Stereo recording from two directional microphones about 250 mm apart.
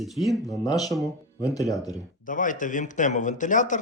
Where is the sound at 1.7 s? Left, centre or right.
Centre.